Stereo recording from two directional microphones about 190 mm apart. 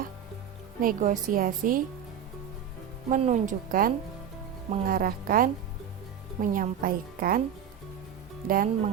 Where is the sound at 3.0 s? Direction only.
40° right (ahead or behind).